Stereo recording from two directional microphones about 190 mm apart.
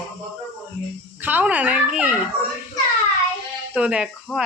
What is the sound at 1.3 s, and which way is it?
Speech, 10° right (ahead or behind).